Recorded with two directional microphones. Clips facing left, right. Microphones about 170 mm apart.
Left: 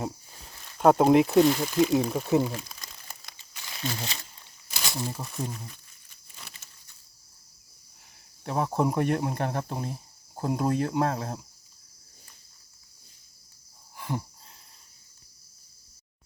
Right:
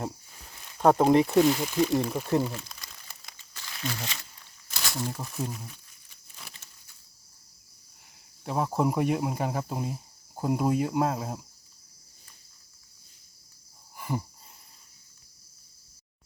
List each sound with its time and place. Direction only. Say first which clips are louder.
0.8 s speech: left 1 dB; 5° left (ahead or behind)
3.8 s speech: left 1 dB; 30° left (ahead or behind)
4.9 s speech: even; 10° left (ahead or behind)
5.2 s speech: even; centre (ahead or behind)
8.4 s speech: even; centre (ahead or behind)
13.9 s a sound: even; 10° right (ahead or behind)